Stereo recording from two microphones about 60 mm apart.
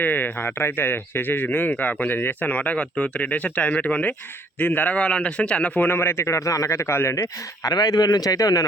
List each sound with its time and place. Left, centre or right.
0.0 s speech: left
6.0 s speech: left
7.6 s speech: left